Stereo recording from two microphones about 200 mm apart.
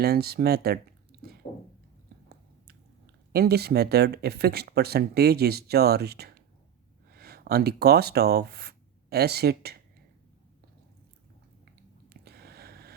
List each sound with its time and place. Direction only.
0.0 s speech: 50° right (ahead or behind)
3.3 s speech: 50° right (ahead or behind)
11.6 s a sound: 50° right (ahead or behind)